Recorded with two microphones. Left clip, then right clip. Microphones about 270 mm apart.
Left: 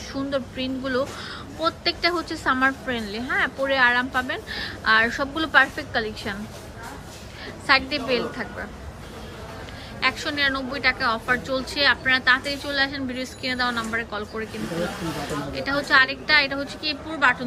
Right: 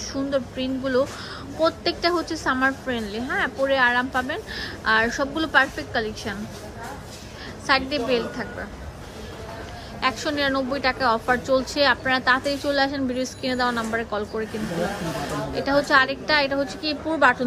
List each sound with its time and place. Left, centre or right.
0.1 s a woman's voice: centre
7.7 s a woman's voice: centre
10.0 s a woman's voice: centre
15.5 s a woman's voice: centre